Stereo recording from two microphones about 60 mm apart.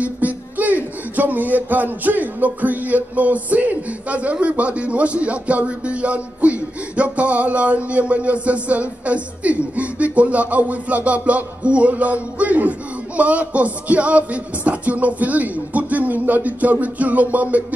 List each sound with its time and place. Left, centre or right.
0.0 s speech: right